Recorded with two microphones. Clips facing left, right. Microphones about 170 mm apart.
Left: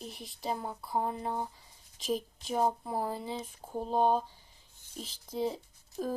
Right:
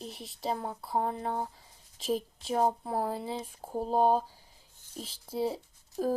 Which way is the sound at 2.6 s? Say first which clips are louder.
Right 2 dB; 35° right (ahead or behind).